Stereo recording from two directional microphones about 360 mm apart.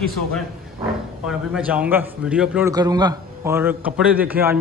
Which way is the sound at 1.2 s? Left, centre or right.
Centre.